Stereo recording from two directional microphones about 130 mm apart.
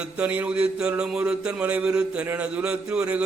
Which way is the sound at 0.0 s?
10° right (ahead or behind).